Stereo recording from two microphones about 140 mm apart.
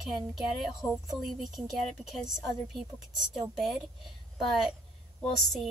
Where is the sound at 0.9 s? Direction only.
Centre (ahead or behind).